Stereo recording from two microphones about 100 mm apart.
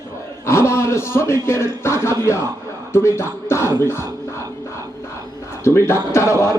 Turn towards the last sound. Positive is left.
turn(degrees=30)  # may be behind; listen again after turning